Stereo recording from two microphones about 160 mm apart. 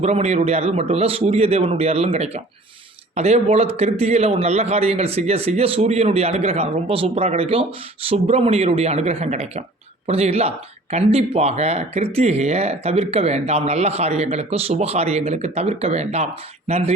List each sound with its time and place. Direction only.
0.0 s a man's voice: 45° right (ahead or behind)